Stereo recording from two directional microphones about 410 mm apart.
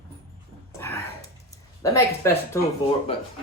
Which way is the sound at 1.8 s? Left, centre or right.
Centre.